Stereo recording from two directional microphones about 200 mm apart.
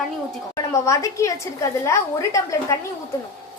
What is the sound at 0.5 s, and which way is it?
A woman's voice, 15° left (ahead or behind).